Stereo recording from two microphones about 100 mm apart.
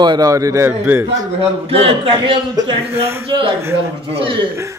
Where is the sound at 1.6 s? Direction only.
75° right (ahead or behind); by 2.8 s 60° right (ahead or behind).